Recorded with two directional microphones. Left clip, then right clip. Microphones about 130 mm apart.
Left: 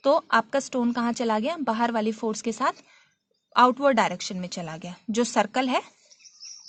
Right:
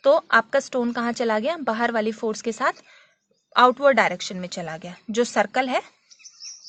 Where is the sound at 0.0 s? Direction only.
30° left (ahead or behind).